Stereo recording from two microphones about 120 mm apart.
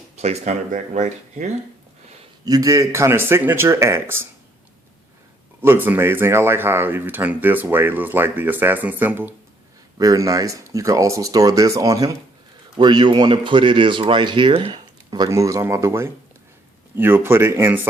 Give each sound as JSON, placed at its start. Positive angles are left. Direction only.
{"t": 0.2, "sound": "speech", "side_deg": -65}
{"t": 2.4, "sound": "speech", "side_deg": -30}
{"t": 5.6, "sound": "speech", "side_deg": -15}
{"t": 10.0, "sound": "speech", "side_deg": -30}
{"t": 12.7, "sound": "speech", "side_deg": -40}
{"t": 15.1, "sound": "speech", "side_deg": -30}